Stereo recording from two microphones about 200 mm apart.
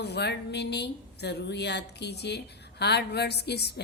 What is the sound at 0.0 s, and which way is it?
Speech, 55° left (ahead or behind).